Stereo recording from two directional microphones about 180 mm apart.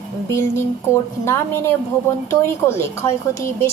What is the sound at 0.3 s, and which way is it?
A woman's voice, 15° left (ahead or behind).